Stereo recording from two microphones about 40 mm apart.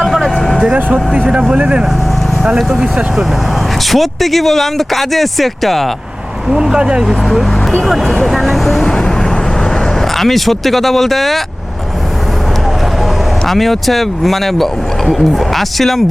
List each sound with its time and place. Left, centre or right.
0.0 s vehicle: centre
1.1 s speech: right
2.6 s speech: centre
3.9 s speech: centre
6.5 s speech: centre
8.0 s speech: centre
8.8 s speech: centre
10.2 s speech: centre
13.5 s speech: centre